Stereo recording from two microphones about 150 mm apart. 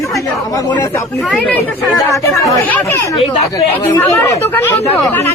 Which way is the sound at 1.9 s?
20° left (ahead or behind).